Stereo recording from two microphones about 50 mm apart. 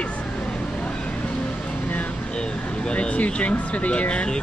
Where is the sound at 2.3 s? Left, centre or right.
Centre.